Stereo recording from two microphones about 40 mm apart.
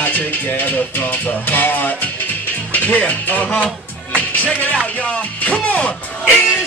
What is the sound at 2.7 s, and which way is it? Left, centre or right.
Speech, left.